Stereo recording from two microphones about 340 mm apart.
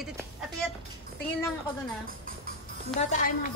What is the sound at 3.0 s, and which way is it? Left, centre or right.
Speech, left.